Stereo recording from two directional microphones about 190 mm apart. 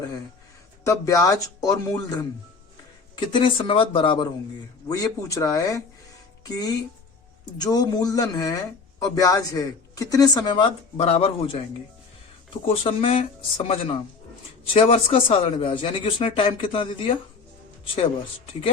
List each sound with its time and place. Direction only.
0.9 s speech: 15° left (ahead or behind)
7.6 s speech: 20° left (ahead or behind)
12.6 s speech: 30° left (ahead or behind)